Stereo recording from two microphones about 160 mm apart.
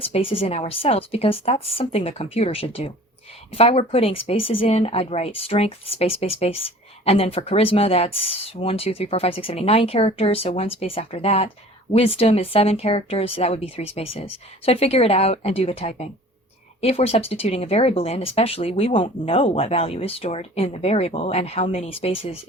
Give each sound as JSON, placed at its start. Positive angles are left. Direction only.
{"t": 0.0, "sound": "speech", "side_deg": 35}